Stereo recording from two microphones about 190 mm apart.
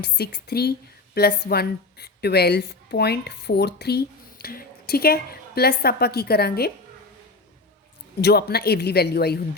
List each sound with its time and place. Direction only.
0.0 s speech: 55° left (ahead or behind)
8.2 s speech: 55° left (ahead or behind)